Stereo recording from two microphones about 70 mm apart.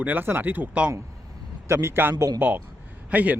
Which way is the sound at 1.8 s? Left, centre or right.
Right.